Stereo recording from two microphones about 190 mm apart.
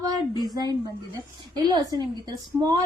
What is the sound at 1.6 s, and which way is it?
Speech, 20° right (ahead or behind).